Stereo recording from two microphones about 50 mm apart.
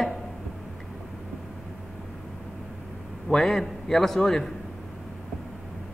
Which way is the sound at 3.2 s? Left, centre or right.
Centre.